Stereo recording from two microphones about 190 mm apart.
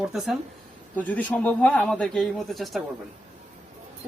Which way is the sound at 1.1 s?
10° left (ahead or behind).